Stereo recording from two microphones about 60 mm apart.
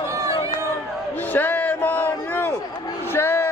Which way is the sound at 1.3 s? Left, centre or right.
Left.